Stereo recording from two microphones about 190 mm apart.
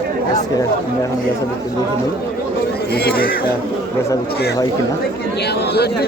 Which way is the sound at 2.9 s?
55° left (ahead or behind).